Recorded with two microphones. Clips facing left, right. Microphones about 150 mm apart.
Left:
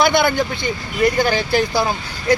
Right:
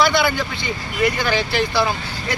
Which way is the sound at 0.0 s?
50° left (ahead or behind).